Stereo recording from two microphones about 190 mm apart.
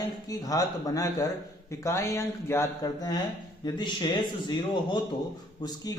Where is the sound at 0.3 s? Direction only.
20° left (ahead or behind).